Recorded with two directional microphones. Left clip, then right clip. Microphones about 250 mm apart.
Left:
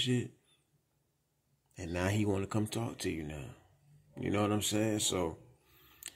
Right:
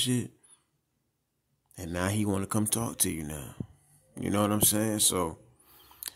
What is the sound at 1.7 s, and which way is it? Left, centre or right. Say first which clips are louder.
Speech: right 3 dB; centre.